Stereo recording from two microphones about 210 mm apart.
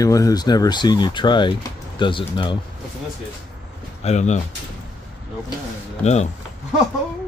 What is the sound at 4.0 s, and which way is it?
Speech, 30° left (ahead or behind).